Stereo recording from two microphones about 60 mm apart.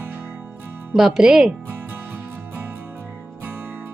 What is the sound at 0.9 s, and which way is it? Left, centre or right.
Speech, centre.